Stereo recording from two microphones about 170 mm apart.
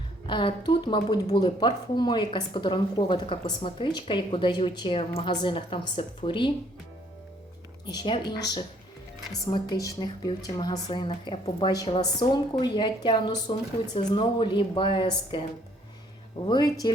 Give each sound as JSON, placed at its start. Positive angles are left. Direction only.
{"t": 0.3, "sound": "a woman's voice", "side_deg": 30}
{"t": 7.9, "sound": "a woman's voice", "side_deg": 25}
{"t": 16.5, "sound": "a woman's voice", "side_deg": 25}